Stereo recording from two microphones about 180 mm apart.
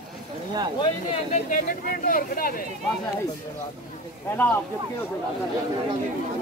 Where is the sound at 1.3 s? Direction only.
50° left (ahead or behind).